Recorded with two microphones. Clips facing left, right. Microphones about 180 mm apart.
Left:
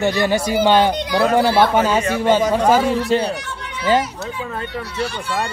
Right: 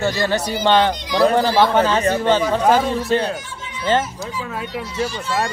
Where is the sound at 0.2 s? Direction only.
10° left (ahead or behind).